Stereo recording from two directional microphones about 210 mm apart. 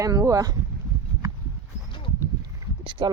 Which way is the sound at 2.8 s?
25° right (ahead or behind).